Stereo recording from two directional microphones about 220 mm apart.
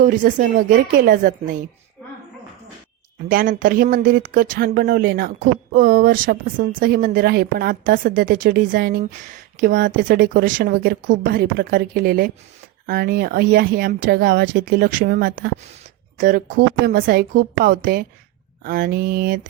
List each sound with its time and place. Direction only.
0.0 s speech: 35° right (ahead or behind)
3.2 s speech: 40° right (ahead or behind)